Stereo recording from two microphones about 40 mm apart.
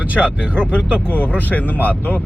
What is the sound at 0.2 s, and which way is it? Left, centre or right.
Speech, centre.